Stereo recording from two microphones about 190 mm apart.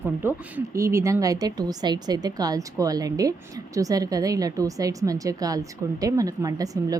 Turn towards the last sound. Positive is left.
turn(degrees=-20)  # may be behind; listen again after turning